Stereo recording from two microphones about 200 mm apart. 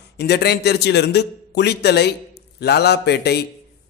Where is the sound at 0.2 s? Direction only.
55° left (ahead or behind).